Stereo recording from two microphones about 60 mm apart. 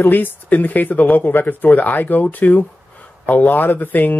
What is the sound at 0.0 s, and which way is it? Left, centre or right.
Speech, left.